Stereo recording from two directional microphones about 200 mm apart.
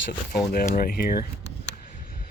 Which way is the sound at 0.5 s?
45° left (ahead or behind).